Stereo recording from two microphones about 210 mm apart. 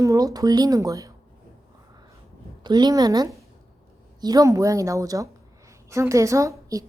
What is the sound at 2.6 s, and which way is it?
A woman's voice, 20° right (ahead or behind).